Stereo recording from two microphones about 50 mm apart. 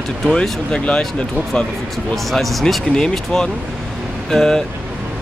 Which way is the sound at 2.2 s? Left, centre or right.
Centre.